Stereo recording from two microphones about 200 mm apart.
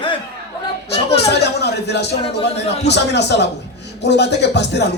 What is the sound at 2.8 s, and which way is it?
Speech, 60° left (ahead or behind).